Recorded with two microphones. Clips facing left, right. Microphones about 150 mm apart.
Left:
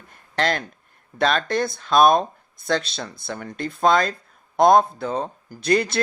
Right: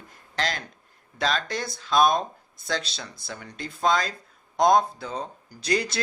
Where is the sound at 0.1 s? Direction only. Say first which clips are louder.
Left 7 dB; 55° left (ahead or behind).